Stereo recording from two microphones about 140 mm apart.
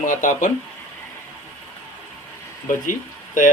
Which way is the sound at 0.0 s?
65° left (ahead or behind).